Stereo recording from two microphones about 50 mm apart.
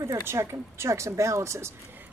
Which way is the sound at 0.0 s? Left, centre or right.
Right.